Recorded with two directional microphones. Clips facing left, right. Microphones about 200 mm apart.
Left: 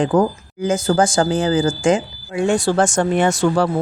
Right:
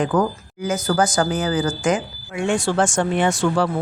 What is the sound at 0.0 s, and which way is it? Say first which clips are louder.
Speech: left 3 dB; 25° left (ahead or behind).